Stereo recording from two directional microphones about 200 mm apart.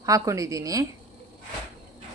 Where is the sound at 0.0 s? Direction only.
15° right (ahead or behind).